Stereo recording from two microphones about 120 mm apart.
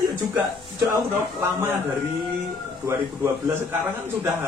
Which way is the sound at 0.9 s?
20° right (ahead or behind).